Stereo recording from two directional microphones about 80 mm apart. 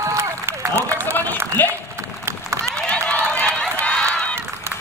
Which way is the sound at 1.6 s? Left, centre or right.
Left.